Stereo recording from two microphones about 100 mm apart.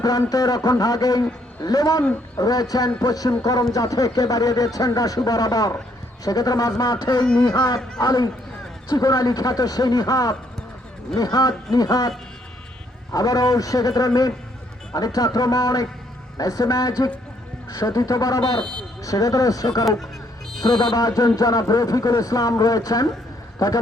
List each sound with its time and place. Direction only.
0.0 s speech: 35° left (ahead or behind)